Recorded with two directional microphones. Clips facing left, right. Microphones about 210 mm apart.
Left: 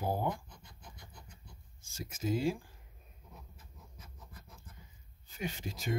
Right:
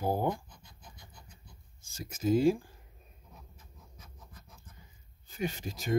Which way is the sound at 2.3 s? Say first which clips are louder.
Right 7 dB; 45° right (ahead or behind).